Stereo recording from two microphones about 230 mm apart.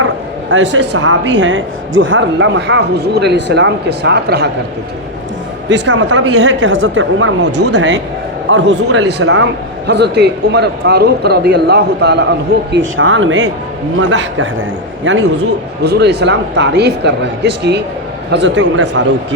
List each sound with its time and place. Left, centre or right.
0.5 s a woman's voice: right
5.6 s a woman's voice: right
12.7 s a woman's voice: right